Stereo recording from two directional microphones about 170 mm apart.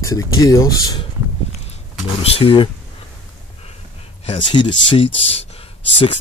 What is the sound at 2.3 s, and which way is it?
Speech, 30° left (ahead or behind).